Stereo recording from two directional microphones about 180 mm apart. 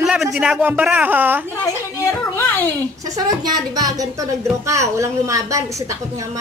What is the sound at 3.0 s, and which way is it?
A woman's voice, 20° right (ahead or behind).